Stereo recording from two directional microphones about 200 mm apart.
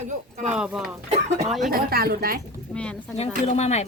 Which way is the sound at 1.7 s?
50° right (ahead or behind).